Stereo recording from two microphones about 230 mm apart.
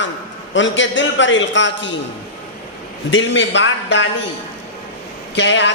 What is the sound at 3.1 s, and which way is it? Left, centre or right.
Speech, left.